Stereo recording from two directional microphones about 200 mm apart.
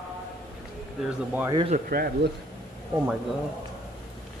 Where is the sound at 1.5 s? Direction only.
25° right (ahead or behind).